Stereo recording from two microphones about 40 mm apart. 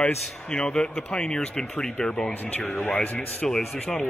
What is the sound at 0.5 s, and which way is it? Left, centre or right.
Speech, left.